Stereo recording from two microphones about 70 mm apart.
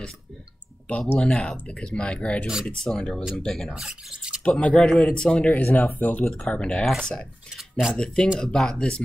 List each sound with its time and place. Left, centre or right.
0.9 s speech: centre
3.8 s speech: centre
4.5 s speech: centre
5.5 s speech: left
6.5 s speech: centre